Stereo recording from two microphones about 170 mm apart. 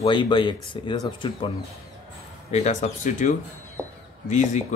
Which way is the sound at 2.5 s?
40° left (ahead or behind).